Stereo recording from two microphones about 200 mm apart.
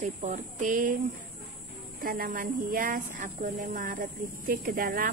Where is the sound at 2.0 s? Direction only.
45° right (ahead or behind).